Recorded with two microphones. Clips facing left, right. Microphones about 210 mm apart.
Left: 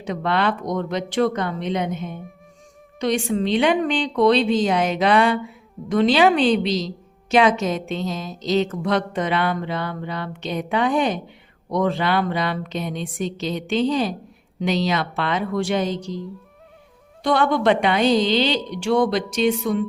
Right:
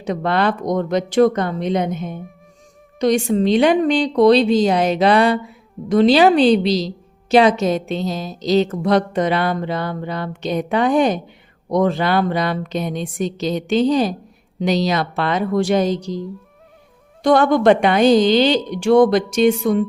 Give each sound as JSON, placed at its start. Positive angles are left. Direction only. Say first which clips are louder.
{"t": 0.0, "sound": "a woman's voice", "louder": "right 3 dB", "side_deg": -40}
{"t": 17.2, "sound": "a woman's voice", "louder": "right 5 dB", "side_deg": -45}